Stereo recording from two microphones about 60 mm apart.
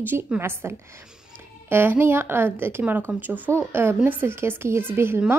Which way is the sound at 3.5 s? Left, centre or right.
Right.